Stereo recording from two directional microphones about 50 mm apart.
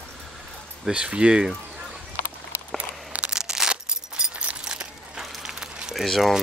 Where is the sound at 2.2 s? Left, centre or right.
Left.